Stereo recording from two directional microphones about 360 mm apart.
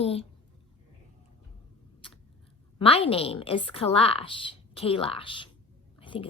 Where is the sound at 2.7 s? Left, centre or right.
Centre.